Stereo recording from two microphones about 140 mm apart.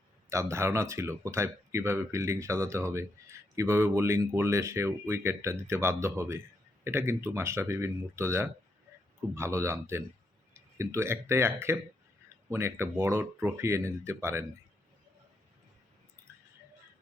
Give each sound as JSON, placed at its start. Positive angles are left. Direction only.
{"t": 0.3, "sound": "speech", "side_deg": -20}